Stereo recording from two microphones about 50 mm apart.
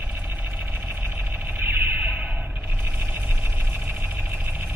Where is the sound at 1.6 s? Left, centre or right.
Right.